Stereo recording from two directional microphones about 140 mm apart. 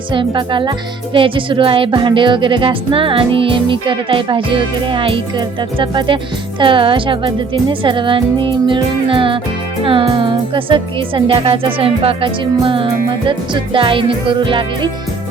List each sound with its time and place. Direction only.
0.1 s music: 35° right (ahead or behind)